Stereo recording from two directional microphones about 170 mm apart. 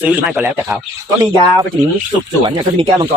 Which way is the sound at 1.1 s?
20° right (ahead or behind).